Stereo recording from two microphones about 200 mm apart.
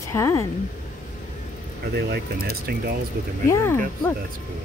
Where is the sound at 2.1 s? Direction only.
50° right (ahead or behind).